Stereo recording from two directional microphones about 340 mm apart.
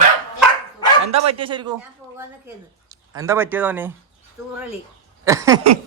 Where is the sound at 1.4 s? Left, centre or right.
Centre.